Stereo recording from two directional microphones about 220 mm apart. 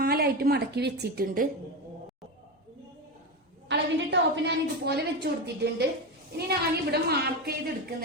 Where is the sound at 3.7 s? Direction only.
50° right (ahead or behind).